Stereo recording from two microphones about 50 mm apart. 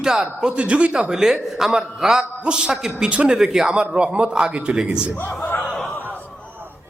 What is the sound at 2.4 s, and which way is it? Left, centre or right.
A man's voice, right.